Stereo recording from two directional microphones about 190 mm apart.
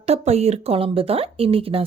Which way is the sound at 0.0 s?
35° right (ahead or behind).